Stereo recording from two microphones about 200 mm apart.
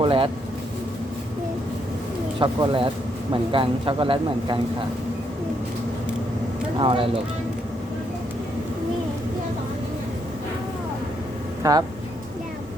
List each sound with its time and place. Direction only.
0.0 s speech: 25° right (ahead or behind)
2.4 s speech: 25° right (ahead or behind)
6.7 s speech: 25° right (ahead or behind)
11.6 s speech: 15° right (ahead or behind)